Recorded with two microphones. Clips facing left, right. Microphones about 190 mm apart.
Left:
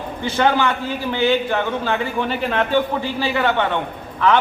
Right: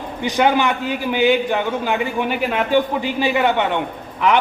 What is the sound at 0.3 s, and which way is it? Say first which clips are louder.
A man's voice: right 1 dB; 15° right (ahead or behind).